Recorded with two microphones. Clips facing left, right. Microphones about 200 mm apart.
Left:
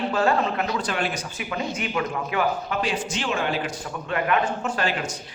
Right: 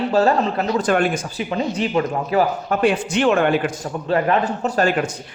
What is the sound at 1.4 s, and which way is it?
A man's voice, 30° right (ahead or behind).